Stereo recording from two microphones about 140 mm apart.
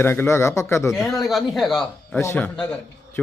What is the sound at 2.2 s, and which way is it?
Speech, 15° left (ahead or behind).